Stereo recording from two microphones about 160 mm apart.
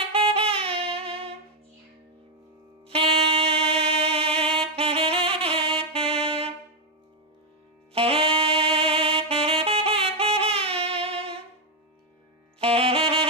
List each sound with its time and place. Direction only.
0.1 s saxophone: 35° right (ahead or behind)
2.9 s music: 35° right (ahead or behind)
4.5 s saxophone: 35° right (ahead or behind)
5.9 s music: 35° right (ahead or behind)
7.9 s saxophone: 35° right (ahead or behind)
12.5 s saxophone: 35° right (ahead or behind)